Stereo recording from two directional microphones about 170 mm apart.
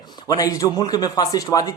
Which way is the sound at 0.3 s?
20° left (ahead or behind).